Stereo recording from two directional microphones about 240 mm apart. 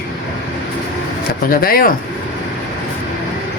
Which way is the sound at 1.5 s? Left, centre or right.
Left.